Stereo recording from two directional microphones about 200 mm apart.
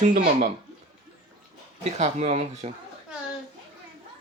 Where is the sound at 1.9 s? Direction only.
35° right (ahead or behind).